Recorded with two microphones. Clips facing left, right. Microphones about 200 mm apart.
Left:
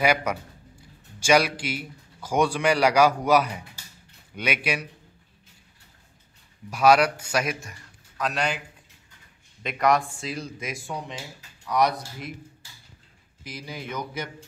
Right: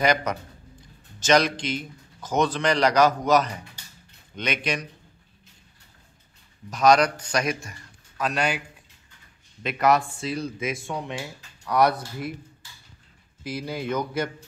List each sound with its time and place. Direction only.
0.0 s a man's voice: 10° left (ahead or behind)
6.7 s a man's voice: 10° left (ahead or behind)
9.6 s a man's voice: centre (ahead or behind)
11.7 s speech: 60° right (ahead or behind)
13.4 s speech: 60° right (ahead or behind)